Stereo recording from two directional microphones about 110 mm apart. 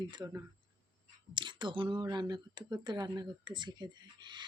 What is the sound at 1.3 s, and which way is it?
Speech, 45° right (ahead or behind).